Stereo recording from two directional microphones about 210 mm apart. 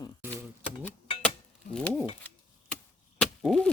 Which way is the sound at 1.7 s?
5° right (ahead or behind).